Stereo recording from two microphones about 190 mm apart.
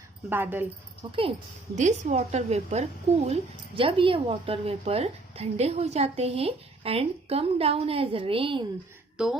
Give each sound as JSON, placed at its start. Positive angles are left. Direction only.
{"t": 0.3, "sound": "speech", "side_deg": -10}
{"t": 1.7, "sound": "speech", "side_deg": -40}
{"t": 9.1, "sound": "a woman's voice", "side_deg": -5}